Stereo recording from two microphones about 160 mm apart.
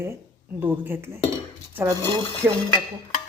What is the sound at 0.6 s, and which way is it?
Speech, 15° right (ahead or behind).